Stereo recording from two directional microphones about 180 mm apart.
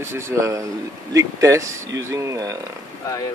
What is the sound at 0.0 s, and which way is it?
Speech, 15° right (ahead or behind).